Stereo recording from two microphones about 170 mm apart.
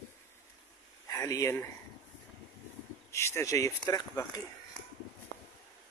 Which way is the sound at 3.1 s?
15° left (ahead or behind).